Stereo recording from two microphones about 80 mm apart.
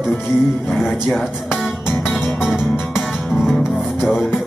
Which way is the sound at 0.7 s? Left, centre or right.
Centre.